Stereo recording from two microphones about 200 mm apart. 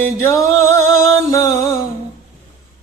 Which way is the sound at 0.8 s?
90° right.